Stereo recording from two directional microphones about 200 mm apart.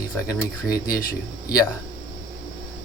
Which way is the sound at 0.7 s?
20° left (ahead or behind).